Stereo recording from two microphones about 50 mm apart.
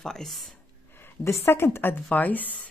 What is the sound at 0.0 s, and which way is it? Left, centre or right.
Speech, centre.